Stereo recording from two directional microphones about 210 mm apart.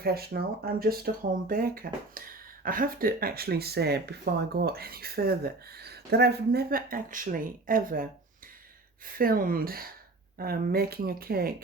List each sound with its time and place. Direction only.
0.0 s speech: 50° right (ahead or behind)
9.1 s speech: 45° right (ahead or behind)